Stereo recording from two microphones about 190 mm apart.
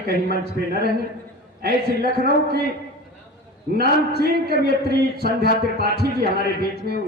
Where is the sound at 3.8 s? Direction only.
55° right (ahead or behind).